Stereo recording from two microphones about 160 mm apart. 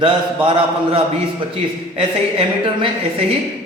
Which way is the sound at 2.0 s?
35° right (ahead or behind).